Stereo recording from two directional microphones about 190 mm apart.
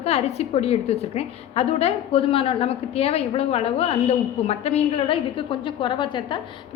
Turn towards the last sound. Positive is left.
turn(degrees=25)  # may be behind; listen again after turning